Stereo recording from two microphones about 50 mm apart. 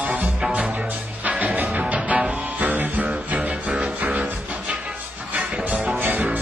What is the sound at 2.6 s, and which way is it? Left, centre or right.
Music, right.